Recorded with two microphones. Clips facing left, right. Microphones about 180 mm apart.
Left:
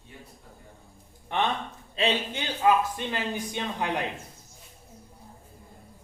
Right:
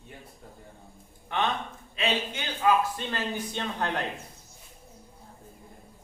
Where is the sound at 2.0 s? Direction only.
25° left (ahead or behind); by 4.0 s 10° left (ahead or behind).